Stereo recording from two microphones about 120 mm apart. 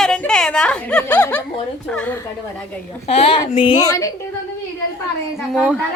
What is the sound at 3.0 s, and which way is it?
Speech, 60° left (ahead or behind).